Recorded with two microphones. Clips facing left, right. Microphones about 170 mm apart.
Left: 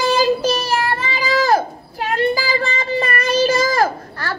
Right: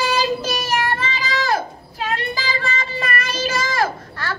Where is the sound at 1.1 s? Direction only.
40° left (ahead or behind).